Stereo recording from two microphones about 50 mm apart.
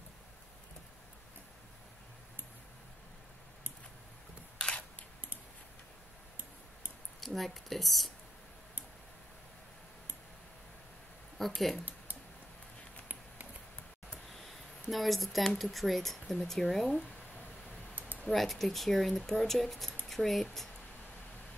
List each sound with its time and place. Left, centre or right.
4.6 s camera: centre
7.2 s speech: centre
11.3 s speech: centre
14.3 s speech: centre
17.9 s typing: right
18.3 s speech: centre